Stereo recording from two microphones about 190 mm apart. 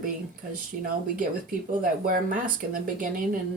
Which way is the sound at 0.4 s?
50° right (ahead or behind).